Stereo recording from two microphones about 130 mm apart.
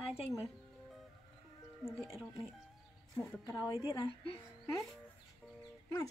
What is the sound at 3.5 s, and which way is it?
Speech, 25° left (ahead or behind).